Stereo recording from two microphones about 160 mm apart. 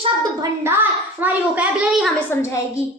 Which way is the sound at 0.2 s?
15° right (ahead or behind).